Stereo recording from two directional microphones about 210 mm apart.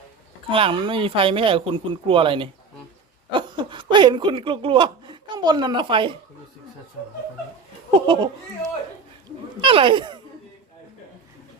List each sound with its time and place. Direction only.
0.5 s speech: 25° right (ahead or behind)
8.0 s speech: 20° right (ahead or behind)